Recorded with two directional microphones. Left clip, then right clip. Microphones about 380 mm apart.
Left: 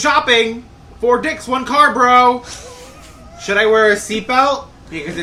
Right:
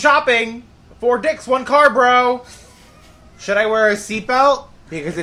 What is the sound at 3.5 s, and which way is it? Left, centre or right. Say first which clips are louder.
Speech: left 3 dB; right.